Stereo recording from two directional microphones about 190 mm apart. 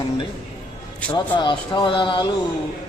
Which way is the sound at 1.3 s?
25° left (ahead or behind).